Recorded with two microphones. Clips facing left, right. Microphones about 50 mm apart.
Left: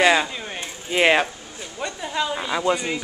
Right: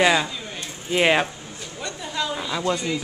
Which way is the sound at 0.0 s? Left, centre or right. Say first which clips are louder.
Left 1 dB; centre.